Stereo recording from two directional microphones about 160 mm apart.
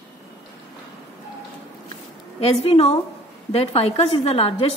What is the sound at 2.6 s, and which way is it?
A woman's voice, 40° left (ahead or behind).